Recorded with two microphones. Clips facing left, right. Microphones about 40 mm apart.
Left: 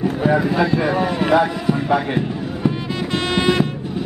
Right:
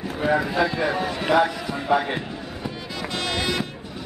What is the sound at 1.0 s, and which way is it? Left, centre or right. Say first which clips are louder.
Speech: left 3 dB; centre.